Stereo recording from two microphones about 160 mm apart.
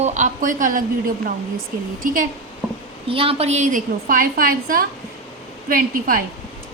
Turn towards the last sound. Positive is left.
turn(degrees=-60)  # may be behind; listen again after turning